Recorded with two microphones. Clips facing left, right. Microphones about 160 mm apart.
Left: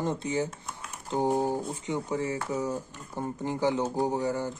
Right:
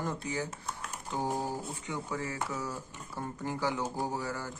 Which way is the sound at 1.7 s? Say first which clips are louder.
Left 6 dB; 20° left (ahead or behind).